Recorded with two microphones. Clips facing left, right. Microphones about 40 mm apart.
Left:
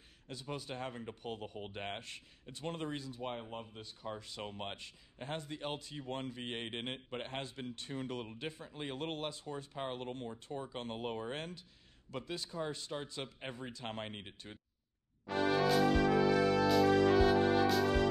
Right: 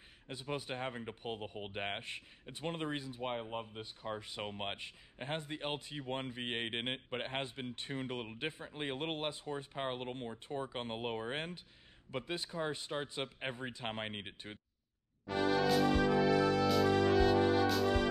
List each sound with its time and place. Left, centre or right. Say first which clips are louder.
0.3 s speech: right 3 dB; right
15.2 s music: even; centre